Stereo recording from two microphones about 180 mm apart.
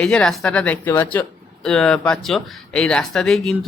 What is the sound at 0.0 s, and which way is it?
A woman's voice, 5° left (ahead or behind).